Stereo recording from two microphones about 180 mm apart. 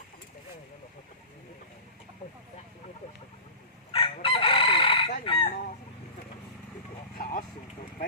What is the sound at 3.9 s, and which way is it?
Chicken, 30° left (ahead or behind).